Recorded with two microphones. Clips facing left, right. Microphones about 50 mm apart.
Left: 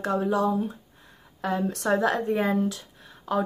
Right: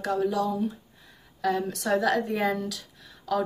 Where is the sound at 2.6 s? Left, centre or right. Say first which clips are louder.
Left 6 dB; left.